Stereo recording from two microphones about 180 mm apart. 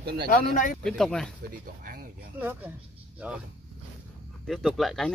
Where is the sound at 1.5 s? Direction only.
50° right (ahead or behind).